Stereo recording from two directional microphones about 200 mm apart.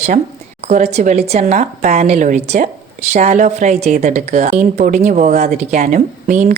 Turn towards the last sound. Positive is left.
turn(degrees=-40)  # may be behind; listen again after turning